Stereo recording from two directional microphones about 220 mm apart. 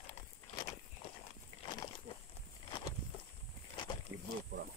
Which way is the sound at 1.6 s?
20° left (ahead or behind).